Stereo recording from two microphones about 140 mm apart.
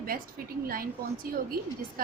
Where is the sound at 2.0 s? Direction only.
90° right.